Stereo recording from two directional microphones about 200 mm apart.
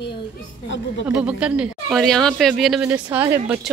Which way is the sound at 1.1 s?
5° right (ahead or behind).